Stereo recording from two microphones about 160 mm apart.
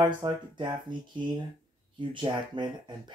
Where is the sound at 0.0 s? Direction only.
30° right (ahead or behind).